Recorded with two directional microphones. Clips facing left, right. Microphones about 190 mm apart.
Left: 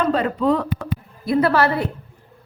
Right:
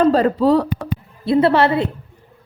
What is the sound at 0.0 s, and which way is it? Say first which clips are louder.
A woman's voice: right 5 dB; 35° right (ahead or behind).